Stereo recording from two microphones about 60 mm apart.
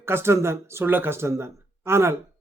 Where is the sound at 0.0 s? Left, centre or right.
Right.